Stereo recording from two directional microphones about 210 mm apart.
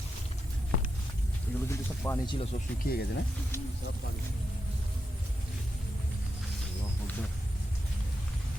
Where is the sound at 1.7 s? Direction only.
15° left (ahead or behind).